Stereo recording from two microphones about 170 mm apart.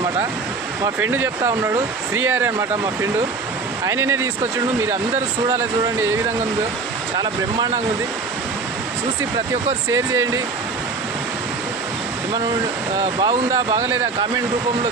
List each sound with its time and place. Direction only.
0.9 s speech: 10° right (ahead or behind)
5.5 s speech: 15° right (ahead or behind)
9.9 s speech: 20° right (ahead or behind)
13.1 s speech: 25° right (ahead or behind)